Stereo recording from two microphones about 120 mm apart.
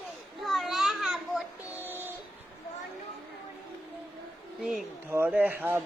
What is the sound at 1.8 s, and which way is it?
Music, 15° right (ahead or behind).